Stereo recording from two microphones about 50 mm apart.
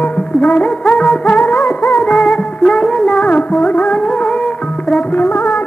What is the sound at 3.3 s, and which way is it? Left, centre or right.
Music, left.